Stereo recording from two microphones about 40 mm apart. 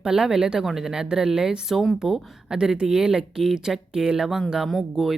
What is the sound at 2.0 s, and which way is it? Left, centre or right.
Speech, centre.